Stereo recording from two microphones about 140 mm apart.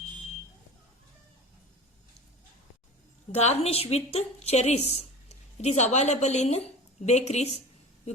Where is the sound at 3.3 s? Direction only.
50° left (ahead or behind).